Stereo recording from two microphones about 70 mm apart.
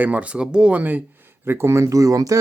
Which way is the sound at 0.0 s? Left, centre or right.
Right.